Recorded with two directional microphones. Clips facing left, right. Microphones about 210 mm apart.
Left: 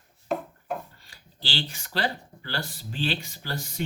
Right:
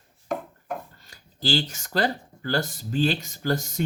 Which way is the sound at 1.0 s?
45° right (ahead or behind).